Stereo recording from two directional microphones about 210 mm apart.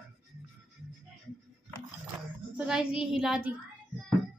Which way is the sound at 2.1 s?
5° right (ahead or behind).